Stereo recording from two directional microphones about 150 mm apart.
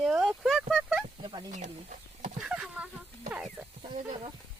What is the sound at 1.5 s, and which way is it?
Chicken, 55° right (ahead or behind).